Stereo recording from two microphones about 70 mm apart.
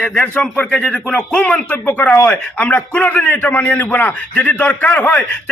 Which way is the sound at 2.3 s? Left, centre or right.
Centre.